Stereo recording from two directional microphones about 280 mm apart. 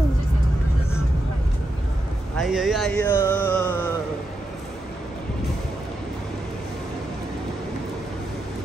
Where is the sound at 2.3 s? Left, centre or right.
Centre.